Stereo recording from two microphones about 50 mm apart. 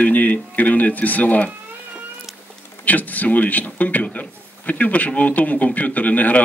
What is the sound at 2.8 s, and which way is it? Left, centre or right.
A man's voice, left.